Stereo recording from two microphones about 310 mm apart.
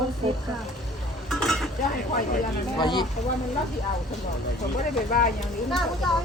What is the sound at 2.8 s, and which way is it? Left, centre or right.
Speech, centre.